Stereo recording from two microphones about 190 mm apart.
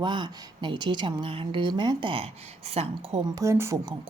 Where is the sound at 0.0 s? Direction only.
25° right (ahead or behind).